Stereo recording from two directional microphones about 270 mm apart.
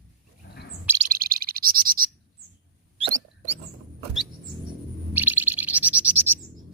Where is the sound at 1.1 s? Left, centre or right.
Right.